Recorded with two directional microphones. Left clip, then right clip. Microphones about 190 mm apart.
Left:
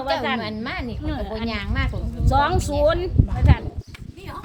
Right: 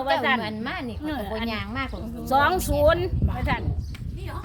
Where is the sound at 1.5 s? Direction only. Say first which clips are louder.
Left 2 dB; 15° left (ahead or behind).